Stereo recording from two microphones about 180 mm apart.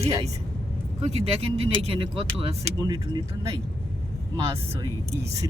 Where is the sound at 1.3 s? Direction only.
35° right (ahead or behind); by 3.6 s 20° right (ahead or behind).